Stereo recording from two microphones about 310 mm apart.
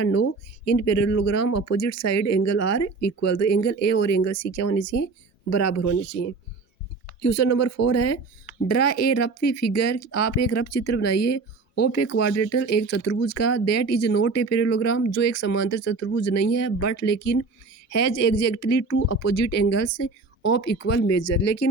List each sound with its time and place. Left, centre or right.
1.0 s speech: left